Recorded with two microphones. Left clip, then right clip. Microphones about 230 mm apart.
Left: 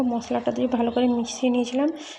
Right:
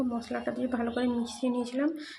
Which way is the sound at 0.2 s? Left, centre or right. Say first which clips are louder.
Left 8 dB; centre.